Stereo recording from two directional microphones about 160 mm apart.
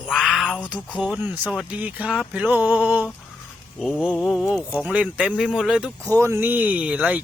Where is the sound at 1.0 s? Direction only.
10° right (ahead or behind).